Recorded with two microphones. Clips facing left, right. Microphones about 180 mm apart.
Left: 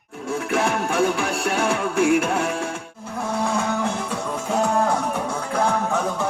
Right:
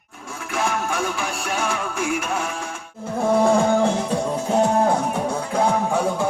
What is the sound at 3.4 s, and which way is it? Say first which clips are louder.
Music: right 6 dB; 35° right (ahead or behind).